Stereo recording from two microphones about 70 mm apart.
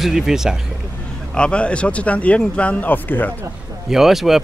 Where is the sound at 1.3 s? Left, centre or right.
Centre.